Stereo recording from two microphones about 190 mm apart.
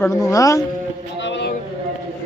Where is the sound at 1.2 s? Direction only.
65° left (ahead or behind).